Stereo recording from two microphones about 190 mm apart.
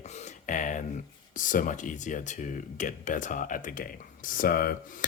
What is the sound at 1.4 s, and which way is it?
Speech, 45° left (ahead or behind).